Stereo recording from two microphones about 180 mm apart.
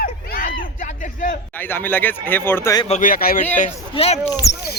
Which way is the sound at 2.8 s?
45° left (ahead or behind).